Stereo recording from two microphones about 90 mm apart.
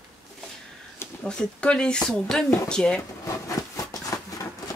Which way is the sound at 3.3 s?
40° left (ahead or behind).